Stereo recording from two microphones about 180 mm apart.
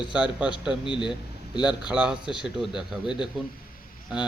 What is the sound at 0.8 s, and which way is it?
Speech, 25° left (ahead or behind).